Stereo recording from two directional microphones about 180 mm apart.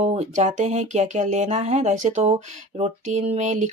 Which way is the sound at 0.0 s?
40° right (ahead or behind).